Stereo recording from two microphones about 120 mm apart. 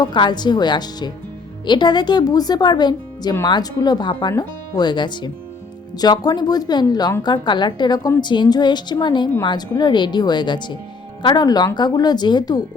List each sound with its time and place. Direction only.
0.0 s speech: 40° left (ahead or behind)